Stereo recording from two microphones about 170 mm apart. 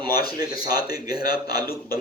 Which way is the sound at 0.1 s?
65° left (ahead or behind).